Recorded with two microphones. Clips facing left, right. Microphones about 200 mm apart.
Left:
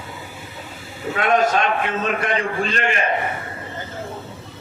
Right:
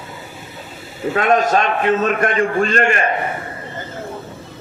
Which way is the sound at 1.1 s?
45° right (ahead or behind).